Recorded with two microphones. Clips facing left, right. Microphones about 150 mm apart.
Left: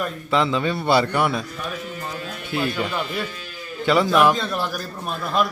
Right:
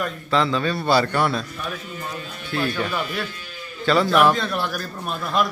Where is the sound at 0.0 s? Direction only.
20° left (ahead or behind).